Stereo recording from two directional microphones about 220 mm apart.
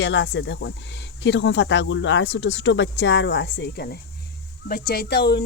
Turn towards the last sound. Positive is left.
turn(degrees=45)  # may be behind; listen again after turning